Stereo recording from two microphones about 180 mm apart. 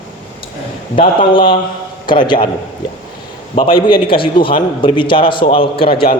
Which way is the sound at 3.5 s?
30° left (ahead or behind).